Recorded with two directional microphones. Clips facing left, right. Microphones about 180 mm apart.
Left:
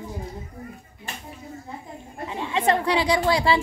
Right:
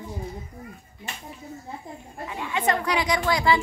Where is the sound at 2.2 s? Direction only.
25° left (ahead or behind).